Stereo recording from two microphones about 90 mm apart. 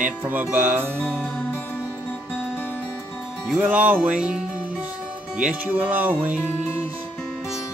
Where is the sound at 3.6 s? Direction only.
20° right (ahead or behind).